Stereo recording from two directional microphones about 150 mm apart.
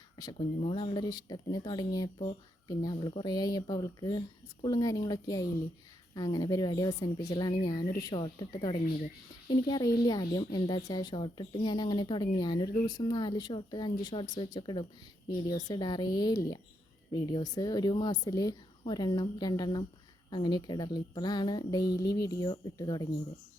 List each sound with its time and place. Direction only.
0.3 s a woman's voice: 35° left (ahead or behind)